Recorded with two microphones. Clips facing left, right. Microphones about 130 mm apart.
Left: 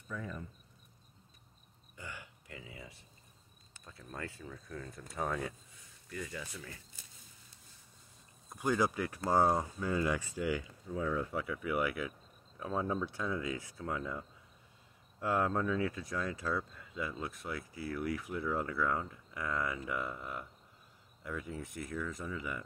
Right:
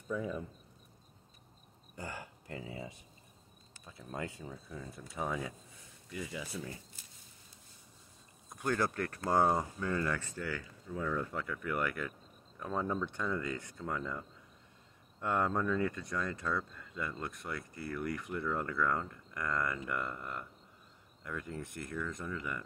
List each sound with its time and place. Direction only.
0.1 s speech: 10° right (ahead or behind)
2.0 s a sound: 40° right (ahead or behind)
3.8 s speech: 15° right (ahead or behind)
8.5 s speech: 10° left (ahead or behind)